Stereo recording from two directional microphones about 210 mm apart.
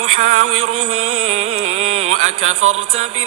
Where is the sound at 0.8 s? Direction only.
30° right (ahead or behind).